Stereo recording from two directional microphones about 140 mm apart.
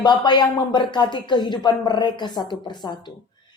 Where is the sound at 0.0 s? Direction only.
35° left (ahead or behind).